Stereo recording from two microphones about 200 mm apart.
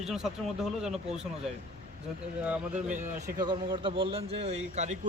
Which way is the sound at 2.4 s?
5° right (ahead or behind).